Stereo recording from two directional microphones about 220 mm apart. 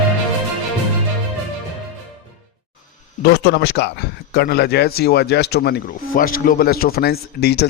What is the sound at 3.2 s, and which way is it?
Speech, 50° left (ahead or behind).